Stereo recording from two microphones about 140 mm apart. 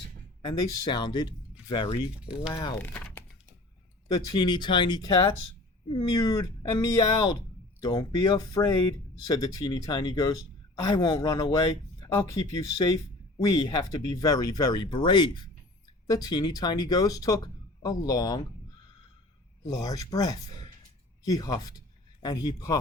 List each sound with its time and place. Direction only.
0.4 s speech: 30° left (ahead or behind)
4.1 s speech: 25° left (ahead or behind)
19.6 s speech: 25° left (ahead or behind)